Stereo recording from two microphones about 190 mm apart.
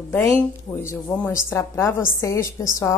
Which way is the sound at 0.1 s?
15° left (ahead or behind).